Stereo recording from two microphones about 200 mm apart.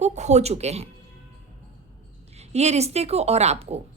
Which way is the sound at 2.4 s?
35° right (ahead or behind).